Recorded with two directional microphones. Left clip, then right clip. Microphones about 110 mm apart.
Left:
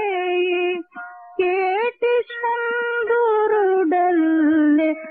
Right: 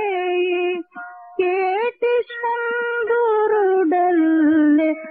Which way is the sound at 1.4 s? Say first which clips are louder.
Even; 25° left (ahead or behind).